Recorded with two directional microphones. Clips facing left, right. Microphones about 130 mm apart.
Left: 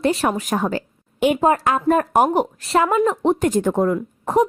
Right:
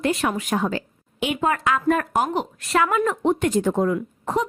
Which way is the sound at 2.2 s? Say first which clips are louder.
Left 6 dB; 50° left (ahead or behind).